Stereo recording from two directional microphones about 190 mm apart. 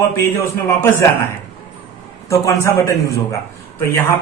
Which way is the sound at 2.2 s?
15° left (ahead or behind).